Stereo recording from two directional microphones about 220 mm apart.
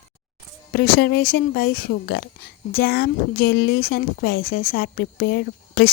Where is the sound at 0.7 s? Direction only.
45° left (ahead or behind).